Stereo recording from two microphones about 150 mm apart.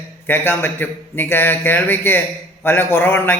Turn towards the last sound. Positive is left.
turn(degrees=15)  # may be behind; listen again after turning